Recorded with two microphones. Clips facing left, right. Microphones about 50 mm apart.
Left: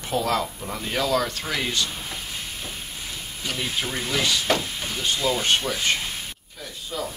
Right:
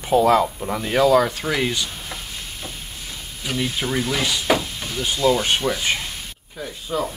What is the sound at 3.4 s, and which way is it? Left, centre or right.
Speech, centre.